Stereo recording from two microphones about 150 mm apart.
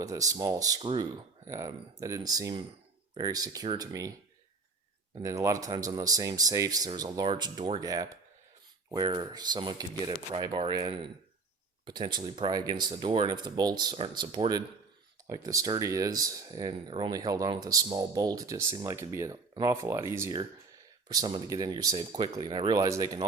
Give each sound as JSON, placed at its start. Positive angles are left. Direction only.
{"t": 0.0, "sound": "speech", "side_deg": -25}
{"t": 1.5, "sound": "speech", "side_deg": -20}
{"t": 5.1, "sound": "speech", "side_deg": -20}